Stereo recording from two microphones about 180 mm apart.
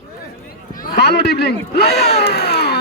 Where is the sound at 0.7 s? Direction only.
60° left (ahead or behind).